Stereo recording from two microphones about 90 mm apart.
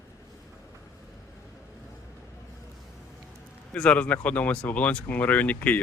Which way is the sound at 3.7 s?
10° left (ahead or behind).